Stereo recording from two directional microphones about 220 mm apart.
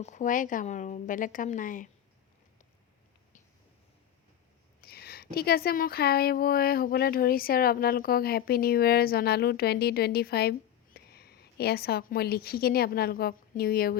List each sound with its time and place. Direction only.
0.0 s a woman's voice: 35° left (ahead or behind)
4.8 s a woman's voice: 45° left (ahead or behind)